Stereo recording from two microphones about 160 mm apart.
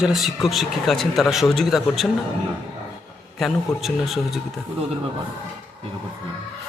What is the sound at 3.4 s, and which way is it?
Speech, centre (ahead or behind).